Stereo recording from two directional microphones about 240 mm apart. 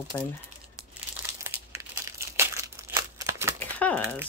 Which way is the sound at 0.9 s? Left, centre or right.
Centre.